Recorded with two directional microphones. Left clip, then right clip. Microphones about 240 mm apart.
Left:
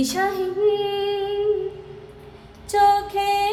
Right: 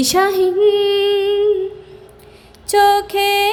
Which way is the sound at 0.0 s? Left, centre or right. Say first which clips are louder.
Right 8 dB; right.